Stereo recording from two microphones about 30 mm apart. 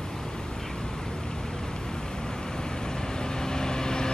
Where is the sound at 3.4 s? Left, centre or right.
Left.